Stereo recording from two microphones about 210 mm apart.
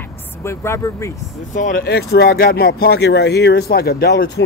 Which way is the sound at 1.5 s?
40° left (ahead or behind).